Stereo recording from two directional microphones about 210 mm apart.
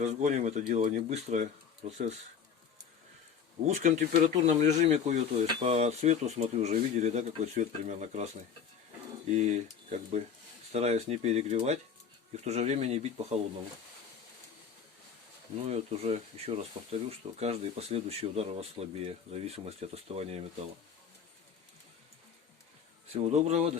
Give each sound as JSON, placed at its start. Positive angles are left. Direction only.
{"t": 0.0, "sound": "speech", "side_deg": -35}
{"t": 3.7, "sound": "speech", "side_deg": -35}
{"t": 9.3, "sound": "speech", "side_deg": -35}
{"t": 15.6, "sound": "speech", "side_deg": -30}
{"t": 23.1, "sound": "speech", "side_deg": -30}